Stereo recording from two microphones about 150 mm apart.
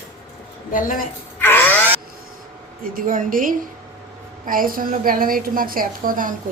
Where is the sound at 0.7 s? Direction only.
65° left (ahead or behind).